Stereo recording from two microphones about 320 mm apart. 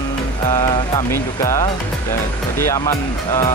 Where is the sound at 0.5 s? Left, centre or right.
Centre.